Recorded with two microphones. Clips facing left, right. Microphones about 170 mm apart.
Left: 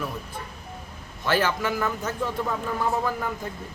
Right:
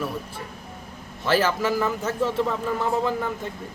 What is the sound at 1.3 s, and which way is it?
Speech, 30° right (ahead or behind).